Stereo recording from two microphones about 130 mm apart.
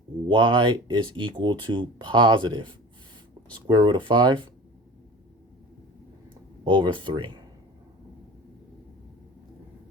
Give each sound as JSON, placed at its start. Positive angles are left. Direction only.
{"t": 0.3, "sound": "speech", "side_deg": -40}
{"t": 6.7, "sound": "speech", "side_deg": -40}